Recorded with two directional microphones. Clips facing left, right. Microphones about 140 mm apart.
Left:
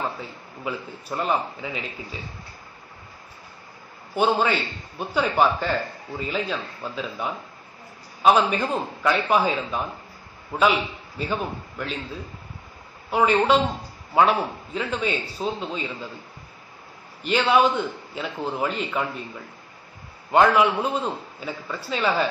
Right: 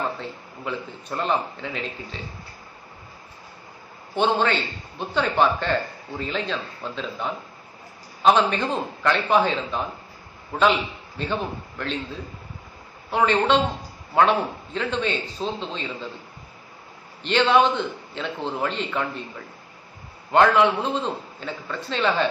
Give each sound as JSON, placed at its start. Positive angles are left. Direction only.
{"t": 0.2, "sound": "a man's voice", "side_deg": 5}
{"t": 4.1, "sound": "a man's voice", "side_deg": 10}
{"t": 13.1, "sound": "a man's voice", "side_deg": 10}
{"t": 17.2, "sound": "a man's voice", "side_deg": 5}